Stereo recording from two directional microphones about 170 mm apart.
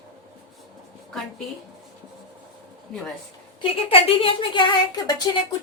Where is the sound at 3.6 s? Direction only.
35° left (ahead or behind).